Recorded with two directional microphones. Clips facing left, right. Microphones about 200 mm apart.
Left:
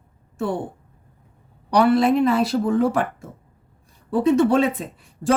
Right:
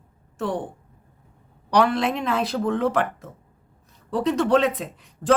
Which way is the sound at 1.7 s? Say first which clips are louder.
Left 4 dB; 5° left (ahead or behind).